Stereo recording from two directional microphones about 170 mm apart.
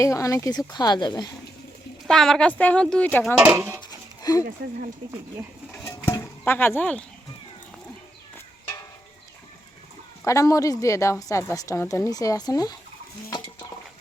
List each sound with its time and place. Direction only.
0.0 s a woman's voice: 20° left (ahead or behind)
2.0 s a woman's voice: centre (ahead or behind)
3.3 s speech: 10° right (ahead or behind)
3.8 s a sound: 25° left (ahead or behind)
5.9 s a sound: 15° left (ahead or behind)
10.2 s a woman's voice: 20° left (ahead or behind)